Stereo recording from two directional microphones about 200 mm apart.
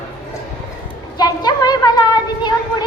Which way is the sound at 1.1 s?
20° left (ahead or behind).